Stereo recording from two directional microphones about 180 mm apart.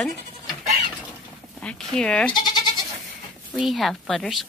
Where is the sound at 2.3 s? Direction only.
25° left (ahead or behind).